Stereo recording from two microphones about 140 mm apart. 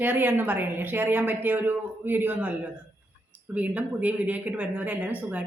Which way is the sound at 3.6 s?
10° right (ahead or behind).